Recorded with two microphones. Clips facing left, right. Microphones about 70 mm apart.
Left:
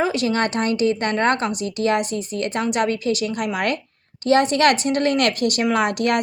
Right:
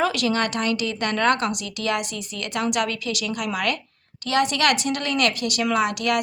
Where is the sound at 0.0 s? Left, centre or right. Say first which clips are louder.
Left 2 dB; left.